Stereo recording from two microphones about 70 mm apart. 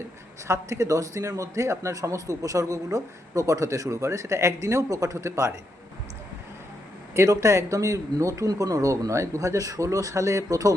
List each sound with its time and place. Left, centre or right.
0.4 s a man's voice: right
7.2 s a man's voice: right